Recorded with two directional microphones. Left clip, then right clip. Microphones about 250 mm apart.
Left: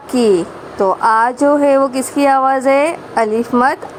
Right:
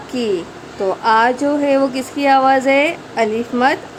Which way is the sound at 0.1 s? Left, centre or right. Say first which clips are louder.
Left 7 dB; left.